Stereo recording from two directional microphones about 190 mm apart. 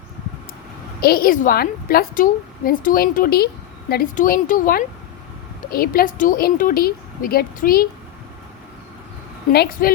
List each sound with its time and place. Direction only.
1.0 s a woman's voice: 50° left (ahead or behind)
9.5 s a woman's voice: 55° left (ahead or behind)